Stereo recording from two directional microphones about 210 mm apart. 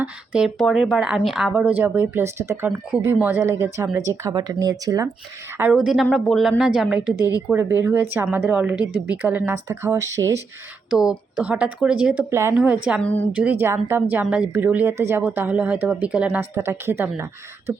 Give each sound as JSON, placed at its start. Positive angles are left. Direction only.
{"t": 0.0, "sound": "a woman's voice", "side_deg": -5}
{"t": 5.5, "sound": "speech", "side_deg": -5}
{"t": 7.2, "sound": "speech", "side_deg": 15}
{"t": 7.4, "sound": "a woman's voice", "side_deg": -10}